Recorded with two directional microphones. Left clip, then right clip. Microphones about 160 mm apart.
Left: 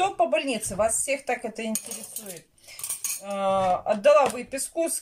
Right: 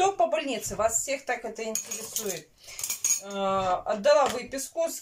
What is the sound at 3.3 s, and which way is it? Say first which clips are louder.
Speech: left 5 dB; 5° left (ahead or behind).